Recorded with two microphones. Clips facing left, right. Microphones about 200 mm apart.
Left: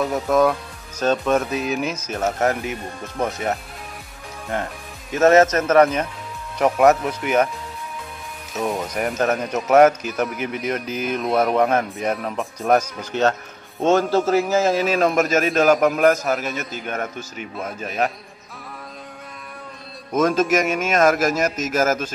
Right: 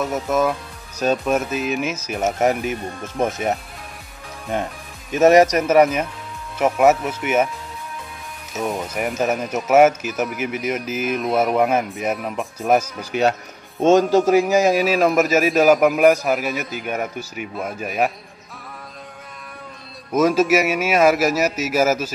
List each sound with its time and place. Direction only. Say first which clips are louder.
0.0 s a man's voice: left 2 dB; 5° right (ahead or behind)
8.5 s a man's voice: even; centre (ahead or behind)
20.2 s a man's voice: right 2 dB; 5° right (ahead or behind)